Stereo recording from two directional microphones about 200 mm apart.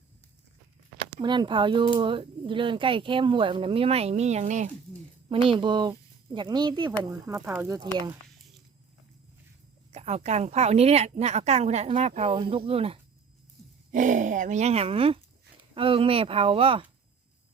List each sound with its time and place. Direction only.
1.2 s speech: 20° right (ahead or behind)
9.9 s a woman's voice: 35° right (ahead or behind)
13.9 s a woman's voice: 40° right (ahead or behind)